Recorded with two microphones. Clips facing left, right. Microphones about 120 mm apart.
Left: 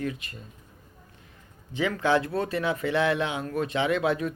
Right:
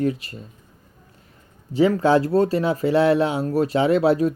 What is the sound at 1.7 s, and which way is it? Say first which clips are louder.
Speech: right 8 dB; 35° right (ahead or behind).